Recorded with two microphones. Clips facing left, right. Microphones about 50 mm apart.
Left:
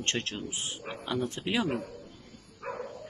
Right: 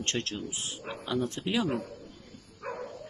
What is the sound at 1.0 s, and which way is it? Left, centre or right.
Speech, centre.